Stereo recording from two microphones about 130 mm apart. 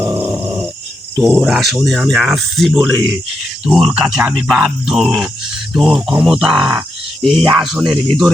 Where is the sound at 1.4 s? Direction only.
Centre (ahead or behind).